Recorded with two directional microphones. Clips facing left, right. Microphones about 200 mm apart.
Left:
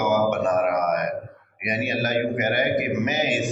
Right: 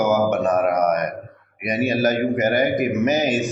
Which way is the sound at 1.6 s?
40° right (ahead or behind).